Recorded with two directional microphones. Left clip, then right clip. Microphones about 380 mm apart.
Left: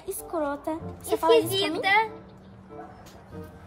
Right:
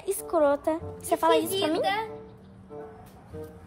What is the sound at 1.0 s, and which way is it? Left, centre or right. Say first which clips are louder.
A woman's voice: left 2 dB; left.